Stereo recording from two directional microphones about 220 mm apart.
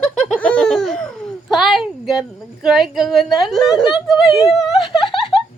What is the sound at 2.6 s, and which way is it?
Whimper, centre (ahead or behind).